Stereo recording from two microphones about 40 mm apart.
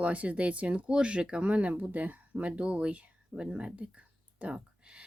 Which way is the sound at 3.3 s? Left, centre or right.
Right.